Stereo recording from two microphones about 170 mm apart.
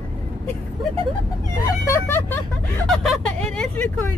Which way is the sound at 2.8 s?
Centre (ahead or behind).